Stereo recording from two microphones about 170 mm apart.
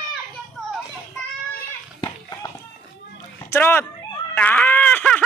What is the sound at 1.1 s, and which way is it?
Children playing, 10° left (ahead or behind).